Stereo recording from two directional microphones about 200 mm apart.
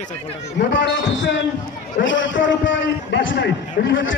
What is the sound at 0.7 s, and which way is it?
A man's voice, 60° left (ahead or behind).